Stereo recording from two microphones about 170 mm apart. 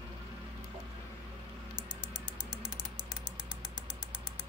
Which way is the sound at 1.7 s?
5° right (ahead or behind).